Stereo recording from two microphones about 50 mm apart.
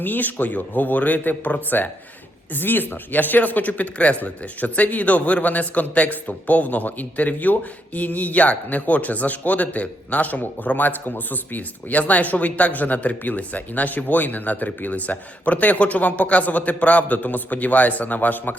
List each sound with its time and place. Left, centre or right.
0.0 s speech: left